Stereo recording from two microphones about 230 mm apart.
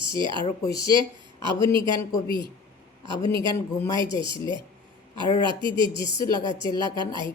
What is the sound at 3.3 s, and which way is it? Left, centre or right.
Speech, centre.